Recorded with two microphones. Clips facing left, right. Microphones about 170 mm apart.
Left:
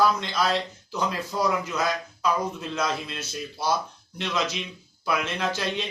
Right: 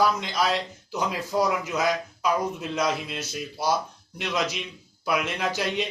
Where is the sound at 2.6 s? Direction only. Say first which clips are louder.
Right 2 dB; 10° right (ahead or behind).